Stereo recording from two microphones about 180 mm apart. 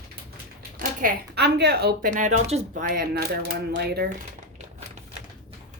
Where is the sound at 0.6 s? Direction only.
55° right (ahead or behind).